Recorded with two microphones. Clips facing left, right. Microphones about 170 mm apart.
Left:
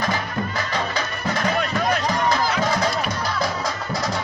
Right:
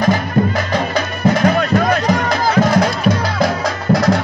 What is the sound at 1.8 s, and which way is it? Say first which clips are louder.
Music: right 6 dB; 60° right (ahead or behind).